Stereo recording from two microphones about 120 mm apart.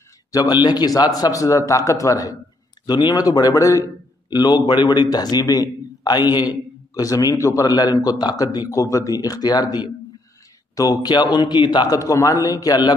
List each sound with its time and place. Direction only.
0.3 s a man's voice: 35° left (ahead or behind)
12.0 s a man's voice: 30° left (ahead or behind)